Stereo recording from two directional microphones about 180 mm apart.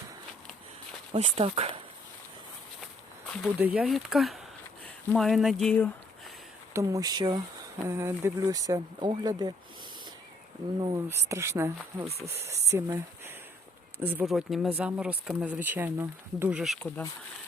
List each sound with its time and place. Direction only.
1.1 s speech: 35° right (ahead or behind)
3.6 s speech: centre (ahead or behind)
6.7 s speech: 20° right (ahead or behind)
10.8 s speech: 20° right (ahead or behind)
12.0 s speech: 35° right (ahead or behind)
12.5 s speech: 15° right (ahead or behind)